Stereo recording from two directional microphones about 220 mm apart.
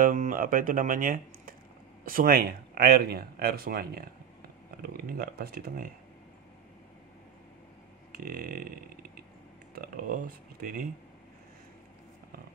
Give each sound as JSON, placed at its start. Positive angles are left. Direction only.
{"t": 0.0, "sound": "speech", "side_deg": -35}
{"t": 8.2, "sound": "speech", "side_deg": -40}
{"t": 9.8, "sound": "speech", "side_deg": -40}